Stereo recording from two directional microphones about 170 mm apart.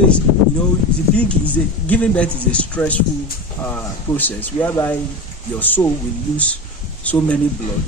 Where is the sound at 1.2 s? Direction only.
10° left (ahead or behind).